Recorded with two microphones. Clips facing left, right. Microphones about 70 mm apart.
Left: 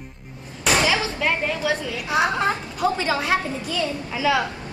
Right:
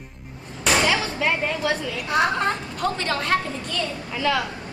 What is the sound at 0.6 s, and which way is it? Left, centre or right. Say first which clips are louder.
Speech: even; centre.